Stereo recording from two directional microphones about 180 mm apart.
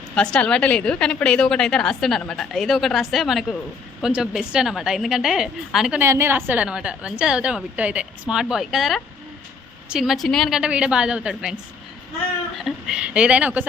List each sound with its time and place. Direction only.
0.1 s a woman's voice: 5° left (ahead or behind)